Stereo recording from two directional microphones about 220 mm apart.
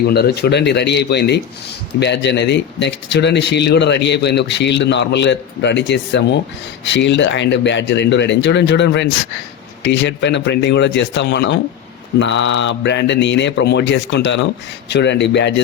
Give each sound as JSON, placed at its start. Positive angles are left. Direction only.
{"t": 0.1, "sound": "speech", "side_deg": 45}